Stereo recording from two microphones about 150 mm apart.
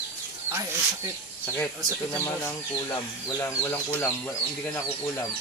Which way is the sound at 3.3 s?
20° left (ahead or behind).